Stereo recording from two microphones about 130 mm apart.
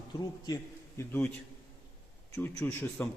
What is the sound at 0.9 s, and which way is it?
Speech, 20° left (ahead or behind).